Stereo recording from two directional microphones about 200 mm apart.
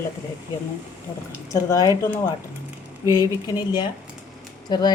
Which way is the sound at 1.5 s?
15° left (ahead or behind).